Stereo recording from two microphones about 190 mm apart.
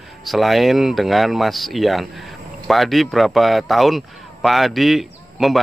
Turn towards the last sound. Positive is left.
turn(degrees=0)  # may be behind; listen again after turning